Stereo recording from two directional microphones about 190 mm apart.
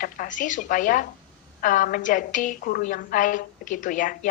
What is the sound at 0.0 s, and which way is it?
A woman's voice, 45° left (ahead or behind).